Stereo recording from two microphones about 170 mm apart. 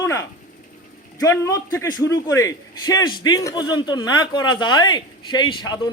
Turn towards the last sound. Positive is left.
turn(degrees=25)  # may be behind; listen again after turning